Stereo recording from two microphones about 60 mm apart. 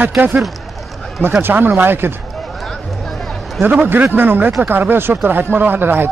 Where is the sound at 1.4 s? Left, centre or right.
Right.